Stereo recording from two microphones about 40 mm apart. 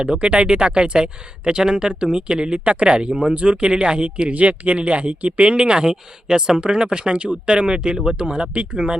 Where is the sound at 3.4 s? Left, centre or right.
Right.